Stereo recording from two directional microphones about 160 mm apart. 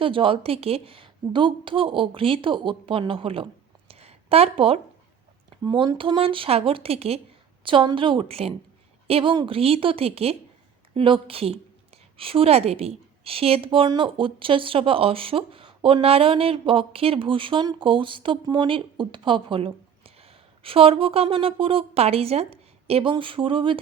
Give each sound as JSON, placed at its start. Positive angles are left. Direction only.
{"t": 0.0, "sound": "a woman's voice", "side_deg": -35}
{"t": 3.8, "sound": "a sound", "side_deg": -40}
{"t": 5.6, "sound": "a woman's voice", "side_deg": -30}